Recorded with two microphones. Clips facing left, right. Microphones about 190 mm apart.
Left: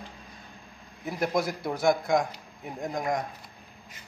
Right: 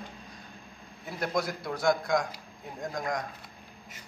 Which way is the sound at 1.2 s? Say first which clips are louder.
Left 3 dB; 20° left (ahead or behind).